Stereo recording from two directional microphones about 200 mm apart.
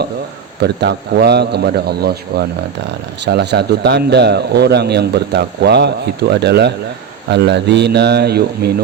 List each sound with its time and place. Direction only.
0.6 s speech: 55° right (ahead or behind)